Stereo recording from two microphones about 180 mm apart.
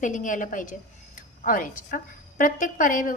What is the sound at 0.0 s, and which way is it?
A woman's voice, 45° left (ahead or behind).